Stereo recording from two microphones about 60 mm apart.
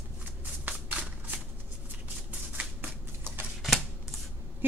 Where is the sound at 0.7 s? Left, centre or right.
Right.